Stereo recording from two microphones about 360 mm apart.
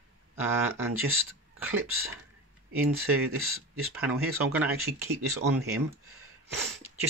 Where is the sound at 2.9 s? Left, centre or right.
Right.